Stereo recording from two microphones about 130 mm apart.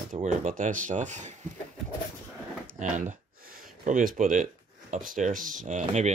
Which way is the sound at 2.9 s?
75° right (ahead or behind).